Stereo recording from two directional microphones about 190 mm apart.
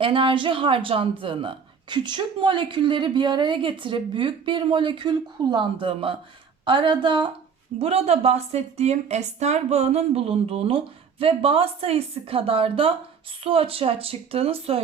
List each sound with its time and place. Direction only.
0.0 s a woman's voice: 25° right (ahead or behind)